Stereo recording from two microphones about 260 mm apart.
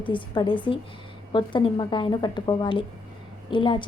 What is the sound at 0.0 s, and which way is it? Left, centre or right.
A woman's voice, centre.